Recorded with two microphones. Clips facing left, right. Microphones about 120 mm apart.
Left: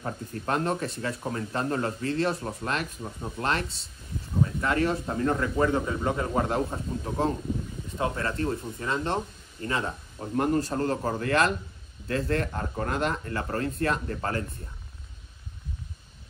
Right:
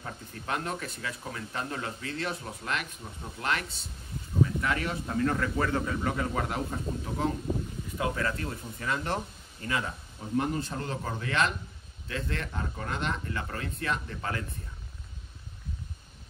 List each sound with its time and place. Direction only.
0.0 s speech: 40° left (ahead or behind)
10.3 s speech: 50° left (ahead or behind)